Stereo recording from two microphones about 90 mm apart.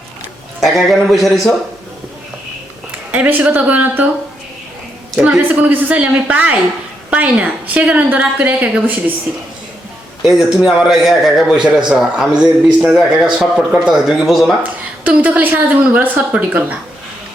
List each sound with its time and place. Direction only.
0.6 s a man's voice: centre (ahead or behind)
3.1 s a woman's voice: 20° right (ahead or behind)
5.1 s a woman's voice: 10° right (ahead or behind)
10.2 s a man's voice: 5° right (ahead or behind)
15.0 s a woman's voice: 15° right (ahead or behind)